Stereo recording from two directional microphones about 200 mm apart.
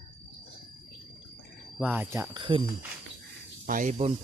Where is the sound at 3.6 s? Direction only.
40° right (ahead or behind).